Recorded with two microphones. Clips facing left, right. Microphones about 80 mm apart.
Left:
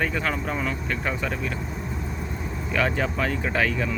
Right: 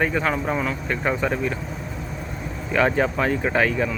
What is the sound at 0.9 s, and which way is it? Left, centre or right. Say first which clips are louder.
Speech: right 5 dB; centre.